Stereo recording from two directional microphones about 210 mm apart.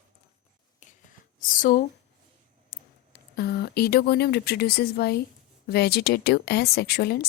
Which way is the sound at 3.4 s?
50° left (ahead or behind).